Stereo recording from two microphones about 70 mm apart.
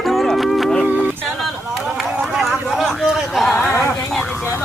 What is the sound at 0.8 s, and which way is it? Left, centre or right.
Music, right.